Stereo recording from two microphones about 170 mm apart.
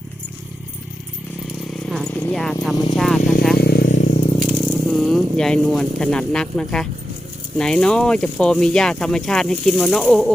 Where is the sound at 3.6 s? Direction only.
65° left (ahead or behind).